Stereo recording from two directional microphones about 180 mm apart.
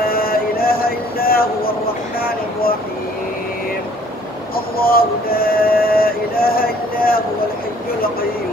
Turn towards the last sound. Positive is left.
turn(degrees=55)  # may be behind; listen again after turning